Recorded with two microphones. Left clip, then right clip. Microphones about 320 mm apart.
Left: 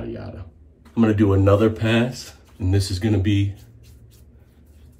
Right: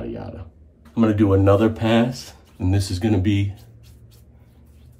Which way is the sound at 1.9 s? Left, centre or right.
Right.